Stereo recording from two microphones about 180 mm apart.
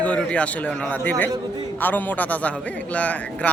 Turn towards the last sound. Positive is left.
turn(degrees=5)  # may be behind; listen again after turning